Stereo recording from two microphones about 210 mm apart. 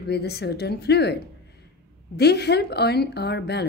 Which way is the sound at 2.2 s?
50° left (ahead or behind).